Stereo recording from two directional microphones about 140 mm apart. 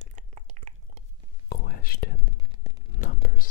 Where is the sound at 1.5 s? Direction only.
90° left.